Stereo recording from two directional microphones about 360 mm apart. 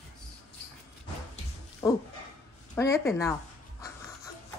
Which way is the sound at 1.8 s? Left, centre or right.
Centre.